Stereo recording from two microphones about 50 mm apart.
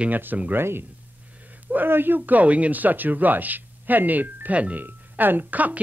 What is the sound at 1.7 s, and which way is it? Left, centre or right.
Speech, right.